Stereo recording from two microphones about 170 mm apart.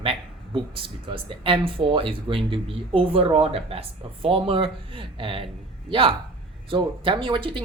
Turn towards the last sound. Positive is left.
turn(degrees=-30)  # may be behind; listen again after turning